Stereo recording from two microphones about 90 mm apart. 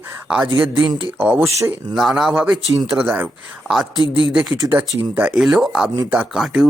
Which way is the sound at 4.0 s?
65° right (ahead or behind).